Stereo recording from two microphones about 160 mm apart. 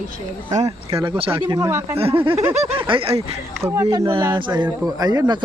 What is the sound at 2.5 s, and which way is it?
Speech, 35° right (ahead or behind).